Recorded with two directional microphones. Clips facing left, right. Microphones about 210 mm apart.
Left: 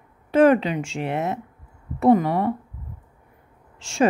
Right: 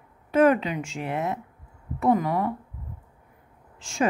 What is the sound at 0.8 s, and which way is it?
Speech, 75° left (ahead or behind).